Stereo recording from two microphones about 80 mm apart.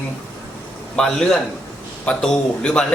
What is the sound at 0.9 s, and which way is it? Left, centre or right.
Speech, centre.